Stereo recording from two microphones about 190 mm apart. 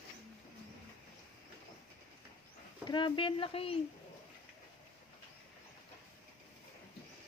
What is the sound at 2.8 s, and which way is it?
Speech, 25° left (ahead or behind).